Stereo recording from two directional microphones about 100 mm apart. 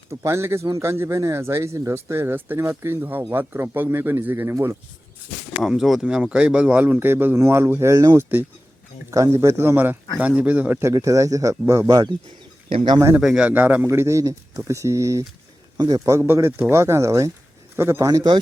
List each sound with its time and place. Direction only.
0.1 s speech: 30° right (ahead or behind)
5.5 s speech: centre (ahead or behind); by 10.9 s 20° right (ahead or behind)
10.9 s speech: 35° right (ahead or behind)
13.1 s speech: 10° right (ahead or behind)
13.8 s speech: 25° right (ahead or behind)
15.8 s a man's voice: 40° right (ahead or behind)
16.1 s speech: 25° right (ahead or behind)